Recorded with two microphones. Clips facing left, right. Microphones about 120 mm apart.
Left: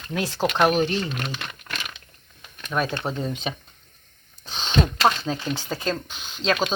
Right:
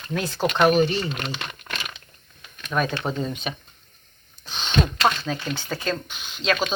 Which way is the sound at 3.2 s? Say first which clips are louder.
Even; 25° left (ahead or behind).